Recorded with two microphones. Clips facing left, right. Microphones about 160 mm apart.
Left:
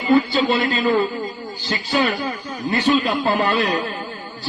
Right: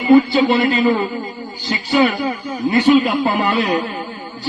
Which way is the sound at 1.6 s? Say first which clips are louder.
Right 5 dB; 10° right (ahead or behind).